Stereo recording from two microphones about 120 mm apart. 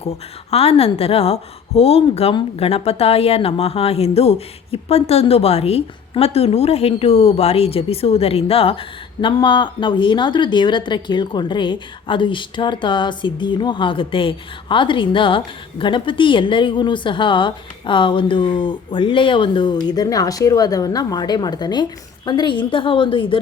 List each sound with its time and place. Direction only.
0.5 s a woman's voice: 55° left (ahead or behind)